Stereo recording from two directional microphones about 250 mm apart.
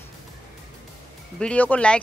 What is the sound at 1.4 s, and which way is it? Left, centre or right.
Speech, centre.